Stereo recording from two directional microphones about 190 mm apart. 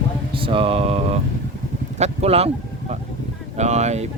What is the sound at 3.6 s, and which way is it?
Speech, 35° right (ahead or behind).